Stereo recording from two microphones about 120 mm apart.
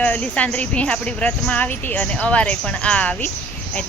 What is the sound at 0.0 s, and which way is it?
Speech, 10° left (ahead or behind).